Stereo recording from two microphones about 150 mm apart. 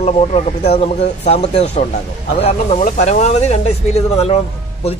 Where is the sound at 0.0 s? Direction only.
45° left (ahead or behind).